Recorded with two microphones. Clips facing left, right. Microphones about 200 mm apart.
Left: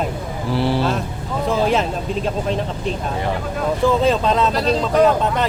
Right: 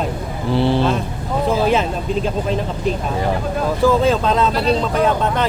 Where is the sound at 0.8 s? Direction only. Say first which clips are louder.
Right 2 dB; 5° left (ahead or behind).